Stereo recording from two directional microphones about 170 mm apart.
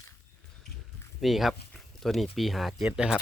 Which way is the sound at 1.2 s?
Centre (ahead or behind).